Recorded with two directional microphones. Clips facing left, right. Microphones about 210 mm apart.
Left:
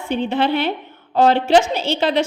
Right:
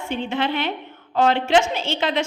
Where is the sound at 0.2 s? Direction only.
35° left (ahead or behind).